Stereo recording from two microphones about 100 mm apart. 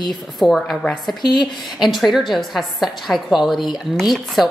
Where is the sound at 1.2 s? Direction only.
50° left (ahead or behind).